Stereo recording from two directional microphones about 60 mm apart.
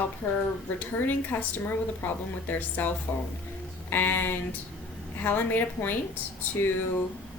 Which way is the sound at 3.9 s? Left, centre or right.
Left.